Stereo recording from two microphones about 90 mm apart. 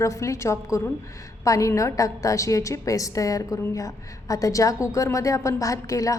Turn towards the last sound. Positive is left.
turn(degrees=40)  # may be behind; listen again after turning